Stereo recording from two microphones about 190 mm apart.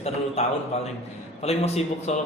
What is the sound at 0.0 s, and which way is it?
A man's voice, 35° left (ahead or behind).